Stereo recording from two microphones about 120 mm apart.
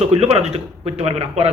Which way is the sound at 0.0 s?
60° right (ahead or behind).